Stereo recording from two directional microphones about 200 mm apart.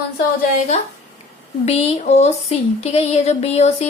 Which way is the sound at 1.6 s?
30° left (ahead or behind).